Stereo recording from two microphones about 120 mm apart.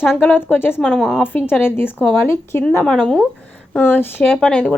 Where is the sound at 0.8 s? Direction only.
5° left (ahead or behind).